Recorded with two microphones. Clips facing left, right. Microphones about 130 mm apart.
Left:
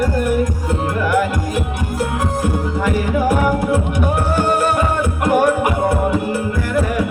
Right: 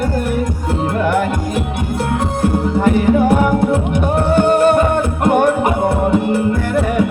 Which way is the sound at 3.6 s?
25° right (ahead or behind).